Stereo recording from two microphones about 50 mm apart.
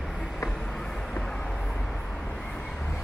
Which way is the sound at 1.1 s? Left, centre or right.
Centre.